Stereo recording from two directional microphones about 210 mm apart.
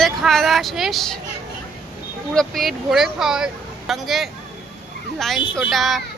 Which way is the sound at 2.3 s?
Centre (ahead or behind).